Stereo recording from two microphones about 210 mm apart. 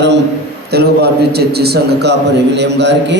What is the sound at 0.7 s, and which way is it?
A man's voice, 50° right (ahead or behind).